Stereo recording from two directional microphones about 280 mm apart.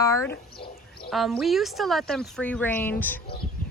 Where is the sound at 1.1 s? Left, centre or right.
Centre.